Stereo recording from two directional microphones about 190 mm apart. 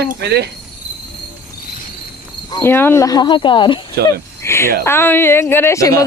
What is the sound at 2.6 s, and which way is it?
Speech, 10° left (ahead or behind).